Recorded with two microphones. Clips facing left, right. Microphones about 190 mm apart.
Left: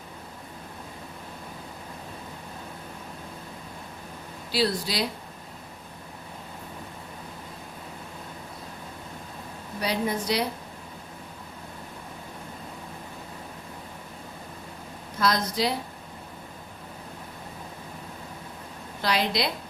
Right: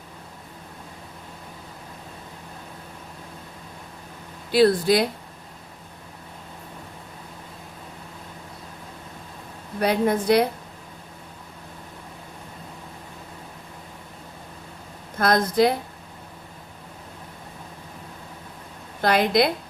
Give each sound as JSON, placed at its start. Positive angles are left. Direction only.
{"t": 4.5, "sound": "speech", "side_deg": -55}
{"t": 9.8, "sound": "a woman's voice", "side_deg": -55}
{"t": 15.2, "sound": "speech", "side_deg": -55}
{"t": 19.0, "sound": "speech", "side_deg": -50}